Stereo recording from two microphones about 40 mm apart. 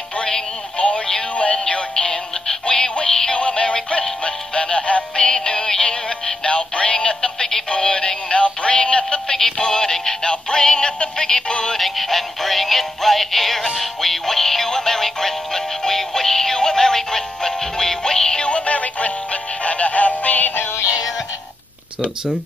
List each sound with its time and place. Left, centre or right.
0.2 s synthetic singing: left
3.3 s music: left
5.2 s synthetic singing: centre
11.7 s synthetic singing: centre
13.7 s music: centre; by 19.1 s left
19.6 s synthetic singing: left